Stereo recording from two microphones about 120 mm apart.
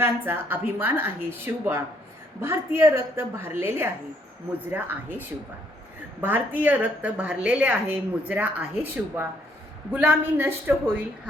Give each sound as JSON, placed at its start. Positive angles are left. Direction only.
{"t": 0.0, "sound": "a woman's voice", "side_deg": -20}
{"t": 6.2, "sound": "a woman's voice", "side_deg": -15}